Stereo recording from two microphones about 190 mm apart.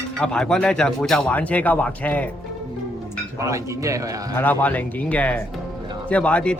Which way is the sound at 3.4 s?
15° right (ahead or behind).